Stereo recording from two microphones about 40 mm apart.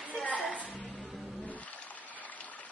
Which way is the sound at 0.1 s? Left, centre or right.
Left.